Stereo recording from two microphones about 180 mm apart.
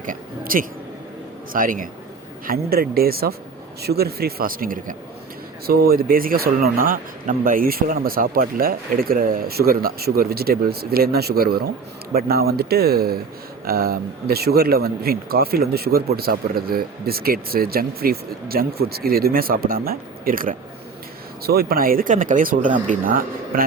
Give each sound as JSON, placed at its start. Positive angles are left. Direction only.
{"t": 0.0, "sound": "speech", "side_deg": -50}